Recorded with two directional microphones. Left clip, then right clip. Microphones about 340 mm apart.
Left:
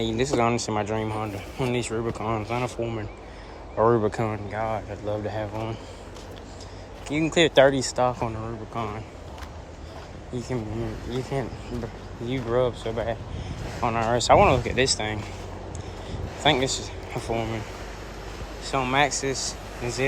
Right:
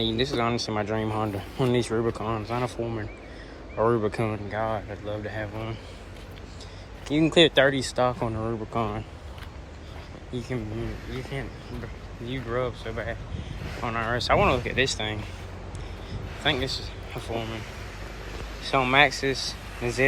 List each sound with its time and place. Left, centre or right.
0.0 s speech: centre
7.1 s speech: centre
10.3 s speech: centre
16.4 s a man's voice: centre
18.6 s speech: centre